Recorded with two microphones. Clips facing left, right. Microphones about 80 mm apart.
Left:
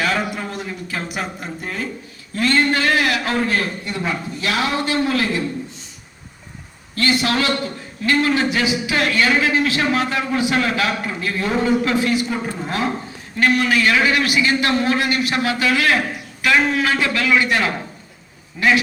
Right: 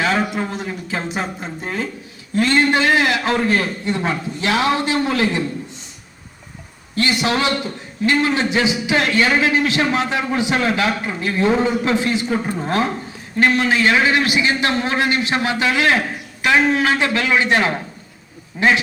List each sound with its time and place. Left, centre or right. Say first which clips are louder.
0.0 s a man's voice: right 2 dB; right
6.9 s a man's voice: even; right